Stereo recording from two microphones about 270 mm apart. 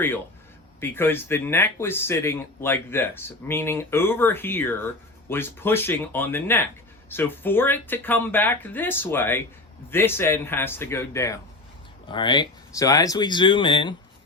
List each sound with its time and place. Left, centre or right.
0.8 s speech: centre